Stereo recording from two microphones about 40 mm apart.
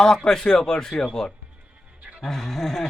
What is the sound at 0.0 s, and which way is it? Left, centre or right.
Speech, centre.